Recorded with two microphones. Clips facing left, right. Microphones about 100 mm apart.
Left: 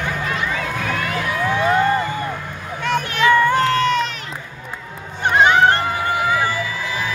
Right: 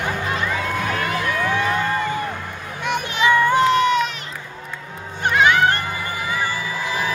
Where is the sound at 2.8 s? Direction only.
15° right (ahead or behind).